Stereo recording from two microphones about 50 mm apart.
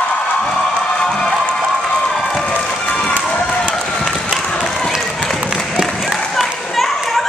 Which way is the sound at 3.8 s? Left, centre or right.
Centre.